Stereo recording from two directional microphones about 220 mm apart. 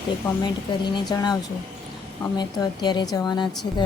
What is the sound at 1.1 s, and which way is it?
Speech, 20° left (ahead or behind).